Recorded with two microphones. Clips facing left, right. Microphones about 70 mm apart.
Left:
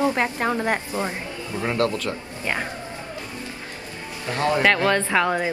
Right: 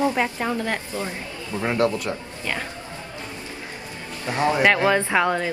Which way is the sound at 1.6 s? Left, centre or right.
Right.